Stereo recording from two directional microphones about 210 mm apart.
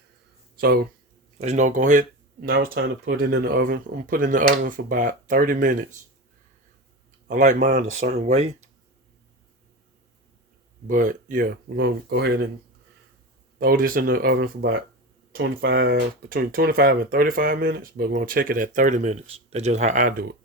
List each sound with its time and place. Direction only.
0.5 s speech: 45° right (ahead or behind)
1.4 s speech: 35° right (ahead or behind)
2.4 s speech: 50° right (ahead or behind)
7.3 s speech: 35° right (ahead or behind)
10.8 s speech: 40° right (ahead or behind)
13.6 s speech: 45° right (ahead or behind)